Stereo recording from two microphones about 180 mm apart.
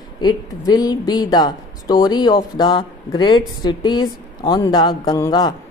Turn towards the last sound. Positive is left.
turn(degrees=20)  # may be behind; listen again after turning